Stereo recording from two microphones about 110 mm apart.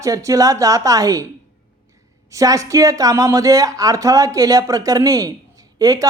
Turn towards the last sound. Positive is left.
turn(degrees=-35)  # may be behind; listen again after turning